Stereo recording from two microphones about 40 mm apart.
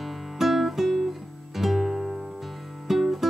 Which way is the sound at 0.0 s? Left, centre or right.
Centre.